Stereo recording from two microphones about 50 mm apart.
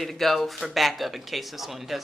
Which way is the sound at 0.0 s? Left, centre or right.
Centre.